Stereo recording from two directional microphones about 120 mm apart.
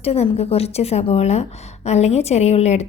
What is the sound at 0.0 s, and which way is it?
A woman's voice, 60° left (ahead or behind).